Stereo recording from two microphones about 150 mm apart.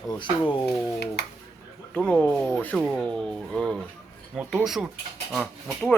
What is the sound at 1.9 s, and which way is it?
Speech, 5° left (ahead or behind).